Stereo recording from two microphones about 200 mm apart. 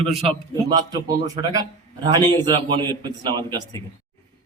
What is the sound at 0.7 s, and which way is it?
A man's voice, 20° right (ahead or behind).